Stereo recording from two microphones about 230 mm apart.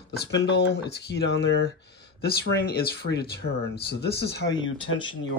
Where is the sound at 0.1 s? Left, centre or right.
Left.